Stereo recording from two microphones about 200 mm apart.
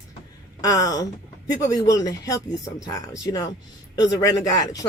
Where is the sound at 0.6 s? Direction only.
15° left (ahead or behind).